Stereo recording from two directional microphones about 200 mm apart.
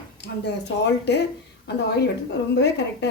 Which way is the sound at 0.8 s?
55° left (ahead or behind).